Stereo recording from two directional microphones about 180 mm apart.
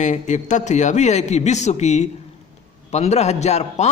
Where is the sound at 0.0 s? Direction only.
40° left (ahead or behind).